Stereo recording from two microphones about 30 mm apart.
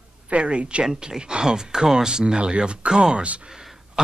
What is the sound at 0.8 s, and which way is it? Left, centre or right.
Speech, right.